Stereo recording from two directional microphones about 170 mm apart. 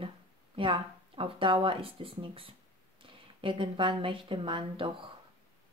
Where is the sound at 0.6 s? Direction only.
30° right (ahead or behind).